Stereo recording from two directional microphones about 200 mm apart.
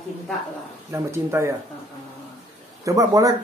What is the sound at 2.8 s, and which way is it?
Speech, 15° right (ahead or behind).